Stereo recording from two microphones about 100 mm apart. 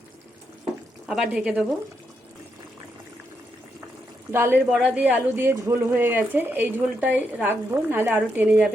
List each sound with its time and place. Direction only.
1.0 s speech: 5° right (ahead or behind)
4.3 s speech: 25° right (ahead or behind)
4.7 s speech: 10° right (ahead or behind)